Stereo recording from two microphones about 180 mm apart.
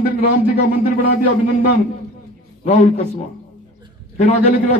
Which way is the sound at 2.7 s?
40° left (ahead or behind).